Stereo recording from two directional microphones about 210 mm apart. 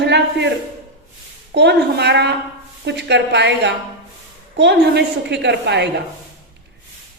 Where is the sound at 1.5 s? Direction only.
55° right (ahead or behind).